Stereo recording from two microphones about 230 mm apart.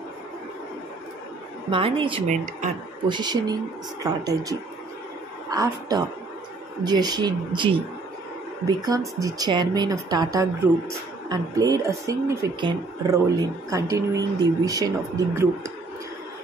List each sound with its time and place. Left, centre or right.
1.7 s a woman's voice: right
3.1 s a woman's voice: centre